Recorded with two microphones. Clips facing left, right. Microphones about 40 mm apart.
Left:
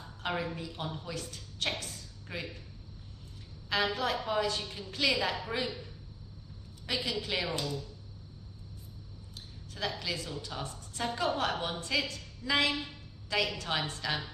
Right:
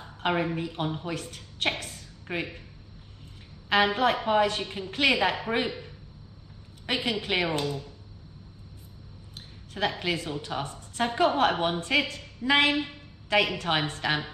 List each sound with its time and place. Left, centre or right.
0.0 s a woman's voice: right
3.6 s a woman's voice: right
9.3 s speech: right